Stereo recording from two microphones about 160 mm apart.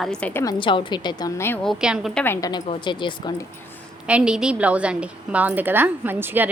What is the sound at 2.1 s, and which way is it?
Speech, 15° left (ahead or behind).